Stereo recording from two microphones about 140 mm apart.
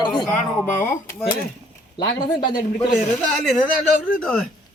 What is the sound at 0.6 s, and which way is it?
Speech, 15° left (ahead or behind).